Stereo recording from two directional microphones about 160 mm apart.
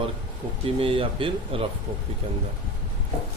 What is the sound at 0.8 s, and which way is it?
Speech, 35° right (ahead or behind).